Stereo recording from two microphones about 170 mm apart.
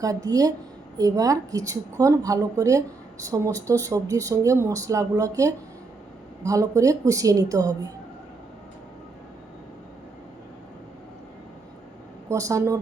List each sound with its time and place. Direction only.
0.0 s speech: 20° right (ahead or behind)
12.3 s speech: 20° right (ahead or behind)